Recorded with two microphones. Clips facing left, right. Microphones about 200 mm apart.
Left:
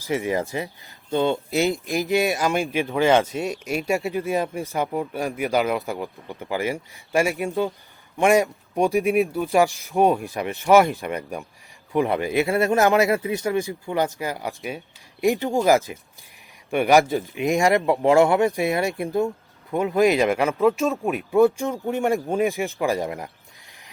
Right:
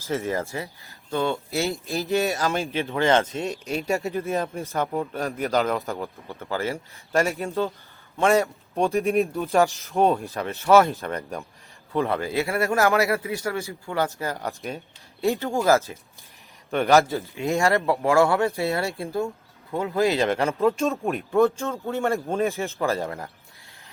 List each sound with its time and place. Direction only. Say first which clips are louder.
0.0 s speech: left 3 dB; 15° left (ahead or behind)